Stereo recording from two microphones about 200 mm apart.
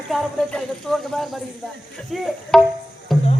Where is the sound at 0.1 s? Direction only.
Centre (ahead or behind).